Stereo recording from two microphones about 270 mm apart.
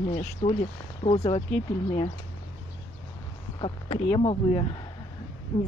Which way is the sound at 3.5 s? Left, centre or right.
Centre.